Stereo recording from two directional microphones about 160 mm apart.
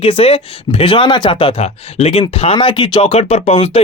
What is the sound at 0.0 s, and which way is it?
Speech, 35° left (ahead or behind).